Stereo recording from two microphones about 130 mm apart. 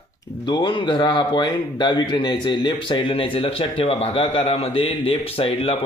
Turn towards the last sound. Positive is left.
turn(degrees=45)  # may be behind; listen again after turning